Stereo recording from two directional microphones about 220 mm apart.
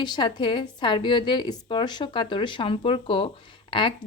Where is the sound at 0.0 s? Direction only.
20° left (ahead or behind).